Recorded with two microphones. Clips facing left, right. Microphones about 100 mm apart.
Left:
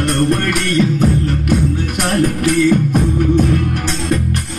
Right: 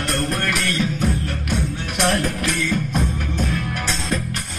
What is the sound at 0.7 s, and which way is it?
Music, 50° left (ahead or behind).